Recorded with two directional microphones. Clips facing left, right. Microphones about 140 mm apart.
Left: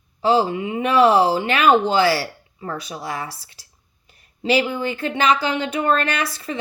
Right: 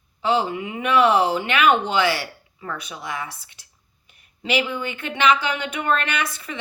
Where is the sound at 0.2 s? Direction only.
35° left (ahead or behind).